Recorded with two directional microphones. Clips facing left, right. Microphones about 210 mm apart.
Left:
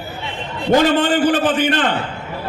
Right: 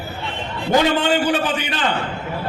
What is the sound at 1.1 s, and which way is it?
Speech, 50° left (ahead or behind).